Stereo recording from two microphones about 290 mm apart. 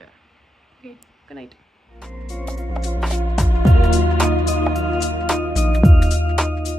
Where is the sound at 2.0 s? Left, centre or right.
Centre.